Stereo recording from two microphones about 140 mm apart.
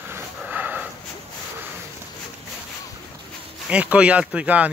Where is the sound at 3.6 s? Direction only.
10° right (ahead or behind).